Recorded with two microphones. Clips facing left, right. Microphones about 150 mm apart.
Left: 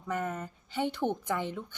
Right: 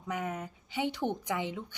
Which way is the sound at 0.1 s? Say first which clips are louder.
Left 2 dB; 10° right (ahead or behind).